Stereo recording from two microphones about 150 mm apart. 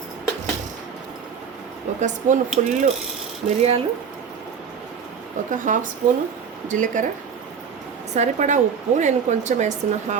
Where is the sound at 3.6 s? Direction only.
45° right (ahead or behind).